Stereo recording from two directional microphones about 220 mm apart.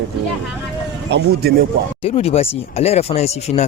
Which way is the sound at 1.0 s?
50° right (ahead or behind).